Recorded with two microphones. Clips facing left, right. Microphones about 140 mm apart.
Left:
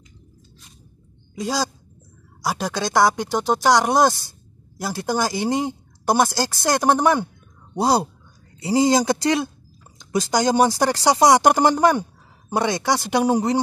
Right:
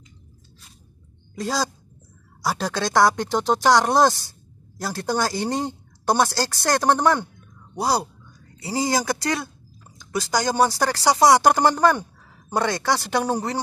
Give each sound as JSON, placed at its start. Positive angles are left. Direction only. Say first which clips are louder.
{"t": 1.3, "sound": "speech", "louder": "left 1 dB", "side_deg": 5}
{"t": 7.7, "sound": "speech", "louder": "left 4 dB", "side_deg": 25}